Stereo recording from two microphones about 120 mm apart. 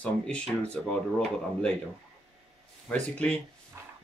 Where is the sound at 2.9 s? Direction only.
10° left (ahead or behind).